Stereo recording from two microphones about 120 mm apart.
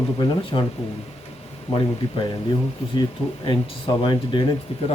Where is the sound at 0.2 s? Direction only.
40° left (ahead or behind).